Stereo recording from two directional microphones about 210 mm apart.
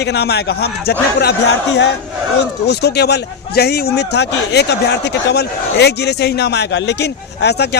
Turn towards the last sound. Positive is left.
turn(degrees=50)  # may be behind; listen again after turning